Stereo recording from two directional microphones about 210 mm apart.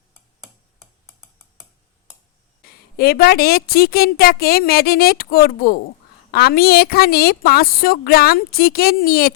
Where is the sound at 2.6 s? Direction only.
45° left (ahead or behind).